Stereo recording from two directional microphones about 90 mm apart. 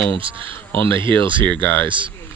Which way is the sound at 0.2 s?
75° right (ahead or behind).